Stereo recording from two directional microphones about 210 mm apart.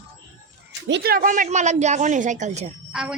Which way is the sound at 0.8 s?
50° right (ahead or behind).